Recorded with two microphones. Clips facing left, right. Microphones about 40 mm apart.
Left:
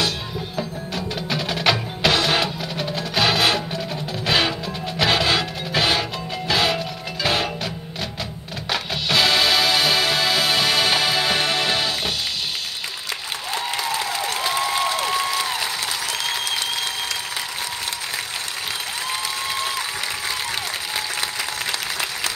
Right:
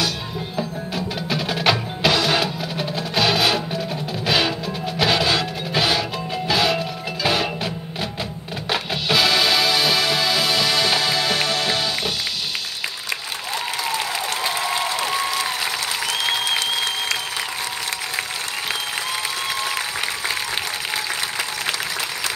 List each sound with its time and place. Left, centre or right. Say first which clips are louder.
0.6 s music: right 2 dB; centre
6.3 s music: right 1 dB; centre
8.6 s music: right 1 dB; centre
9.2 s music: left 1 dB; centre
13.5 s applause: even; centre
14.9 s applause: left 1 dB; centre
15.1 s applause: even; centre
16.1 s applause: right 3 dB; right